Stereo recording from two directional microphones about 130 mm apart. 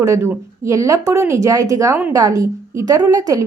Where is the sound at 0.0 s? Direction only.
20° right (ahead or behind).